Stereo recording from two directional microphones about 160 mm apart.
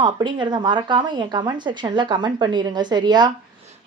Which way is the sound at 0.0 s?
30° right (ahead or behind).